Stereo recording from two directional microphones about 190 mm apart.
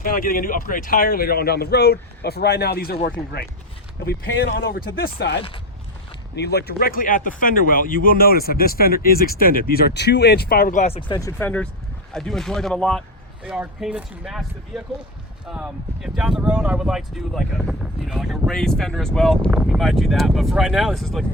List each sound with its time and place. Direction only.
0.0 s speech: 50° left (ahead or behind)
4.5 s speech: 55° left (ahead or behind); by 11.2 s 30° left (ahead or behind)
11.2 s speech: 15° left (ahead or behind)